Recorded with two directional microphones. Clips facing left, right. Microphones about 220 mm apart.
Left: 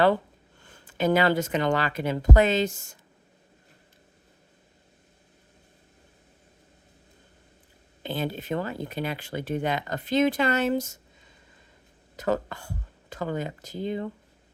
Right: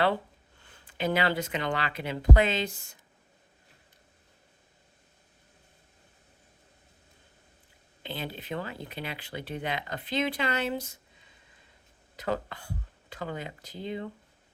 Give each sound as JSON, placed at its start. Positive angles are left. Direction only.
{"t": 0.7, "sound": "speech", "side_deg": 45}
{"t": 8.0, "sound": "speech", "side_deg": 45}
{"t": 12.1, "sound": "speech", "side_deg": 45}